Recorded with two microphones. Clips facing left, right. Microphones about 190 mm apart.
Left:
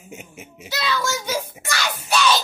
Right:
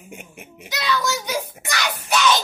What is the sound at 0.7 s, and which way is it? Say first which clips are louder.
Child singing: right 1 dB; 15° right (ahead or behind).